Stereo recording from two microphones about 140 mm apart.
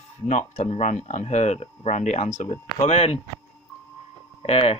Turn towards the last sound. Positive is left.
turn(degrees=45)  # may be behind; listen again after turning